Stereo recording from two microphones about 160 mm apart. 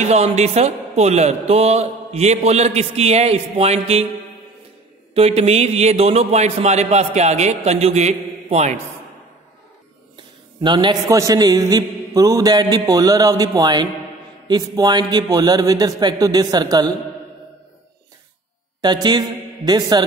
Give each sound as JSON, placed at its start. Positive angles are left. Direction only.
{"t": 0.1, "sound": "speech", "side_deg": -45}
{"t": 5.1, "sound": "a man's voice", "side_deg": -40}
{"t": 10.6, "sound": "a man's voice", "side_deg": -30}
{"t": 18.8, "sound": "a man's voice", "side_deg": -25}